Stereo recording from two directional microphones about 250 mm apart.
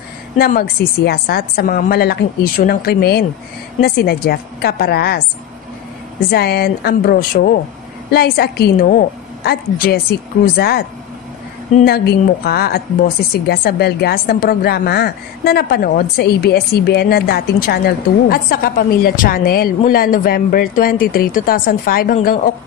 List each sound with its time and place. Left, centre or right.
0.4 s a woman's voice: left
6.3 s a woman's voice: left